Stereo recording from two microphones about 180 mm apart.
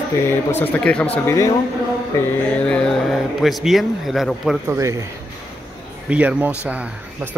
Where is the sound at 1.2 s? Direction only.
15° left (ahead or behind).